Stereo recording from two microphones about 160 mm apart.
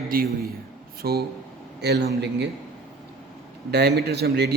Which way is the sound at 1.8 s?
90° right.